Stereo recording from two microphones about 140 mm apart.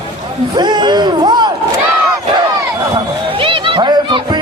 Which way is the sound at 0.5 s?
30° right (ahead or behind).